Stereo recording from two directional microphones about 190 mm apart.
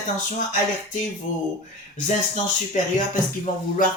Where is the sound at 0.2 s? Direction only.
40° left (ahead or behind).